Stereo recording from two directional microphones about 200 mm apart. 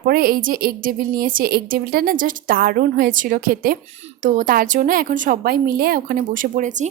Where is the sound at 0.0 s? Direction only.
50° right (ahead or behind).